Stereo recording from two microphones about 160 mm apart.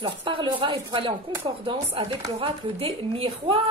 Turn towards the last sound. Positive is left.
turn(degrees=-35)  # may be behind; listen again after turning